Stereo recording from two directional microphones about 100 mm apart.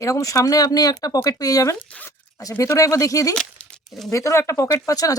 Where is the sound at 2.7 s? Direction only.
35° left (ahead or behind).